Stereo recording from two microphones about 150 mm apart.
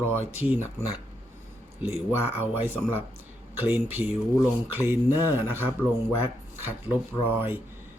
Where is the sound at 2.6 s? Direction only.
15° right (ahead or behind).